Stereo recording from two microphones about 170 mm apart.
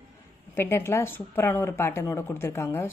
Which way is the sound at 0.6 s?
15° left (ahead or behind).